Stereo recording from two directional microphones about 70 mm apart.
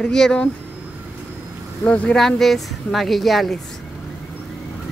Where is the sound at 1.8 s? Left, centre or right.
Centre.